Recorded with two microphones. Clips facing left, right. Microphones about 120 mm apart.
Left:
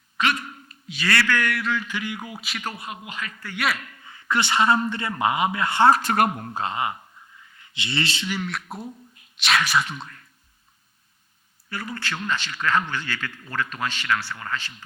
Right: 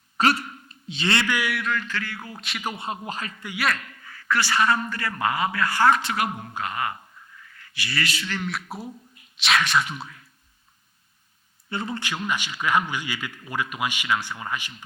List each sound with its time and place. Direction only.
0.2 s a sound: 40° right (ahead or behind)
0.9 s speech: 25° right (ahead or behind)
1.4 s speech: centre (ahead or behind)
1.9 s a sound: 15° left (ahead or behind)
2.4 s speech: centre (ahead or behind)
2.7 s a man's voice: 30° right (ahead or behind)
4.0 s a man's voice: 20° left (ahead or behind)
5.9 s speech: 45° left (ahead or behind)
6.5 s a man's voice: 25° left (ahead or behind)
7.4 s a sound: 20° left (ahead or behind)
8.4 s speech: centre (ahead or behind)
11.7 s a man's voice: 25° right (ahead or behind)